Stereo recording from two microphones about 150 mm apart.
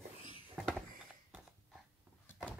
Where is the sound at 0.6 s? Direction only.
5° left (ahead or behind).